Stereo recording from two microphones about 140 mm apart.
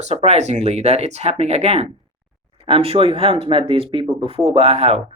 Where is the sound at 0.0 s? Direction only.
50° right (ahead or behind).